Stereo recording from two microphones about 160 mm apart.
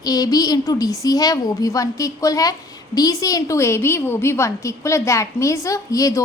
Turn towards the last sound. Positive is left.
turn(degrees=20)  # may be behind; listen again after turning